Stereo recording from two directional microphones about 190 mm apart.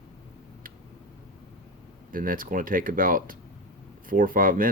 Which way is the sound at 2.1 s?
45° right (ahead or behind).